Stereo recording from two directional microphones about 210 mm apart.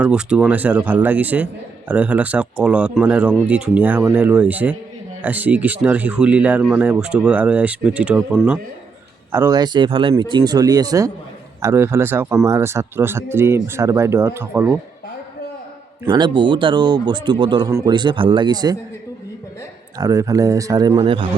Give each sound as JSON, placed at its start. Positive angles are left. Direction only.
{"t": 0.0, "sound": "speech", "side_deg": -5}
{"t": 16.0, "sound": "speech", "side_deg": -20}
{"t": 20.0, "sound": "speech", "side_deg": -15}